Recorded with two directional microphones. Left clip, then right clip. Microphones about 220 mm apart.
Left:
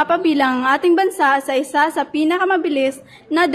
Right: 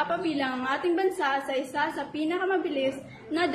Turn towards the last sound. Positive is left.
turn(degrees=50)  # may be behind; listen again after turning